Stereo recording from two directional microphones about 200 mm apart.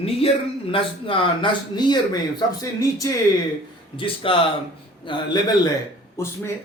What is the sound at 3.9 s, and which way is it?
A man's voice, 25° left (ahead or behind).